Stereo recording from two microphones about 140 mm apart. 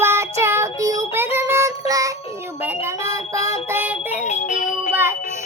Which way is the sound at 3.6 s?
15° right (ahead or behind).